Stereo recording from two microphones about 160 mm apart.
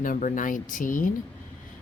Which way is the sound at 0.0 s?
55° left (ahead or behind).